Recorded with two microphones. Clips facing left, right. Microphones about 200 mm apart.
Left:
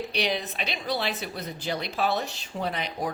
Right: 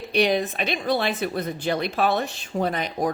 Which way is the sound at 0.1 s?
50° right (ahead or behind).